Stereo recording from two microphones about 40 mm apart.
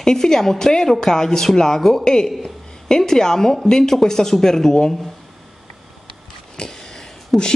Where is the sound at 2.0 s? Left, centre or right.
Centre.